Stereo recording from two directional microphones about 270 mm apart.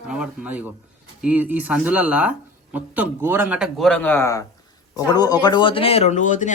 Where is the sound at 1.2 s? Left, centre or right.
Centre.